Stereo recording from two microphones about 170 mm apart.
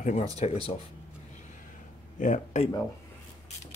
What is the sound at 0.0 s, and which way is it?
Speech, 45° left (ahead or behind).